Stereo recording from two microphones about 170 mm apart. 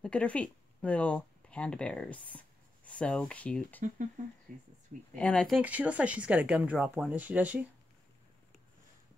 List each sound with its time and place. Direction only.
0.0 s speech: 5° left (ahead or behind)
4.5 s speech: 50° right (ahead or behind)
5.1 s speech: 5° left (ahead or behind)
5.6 s speech: 10° right (ahead or behind)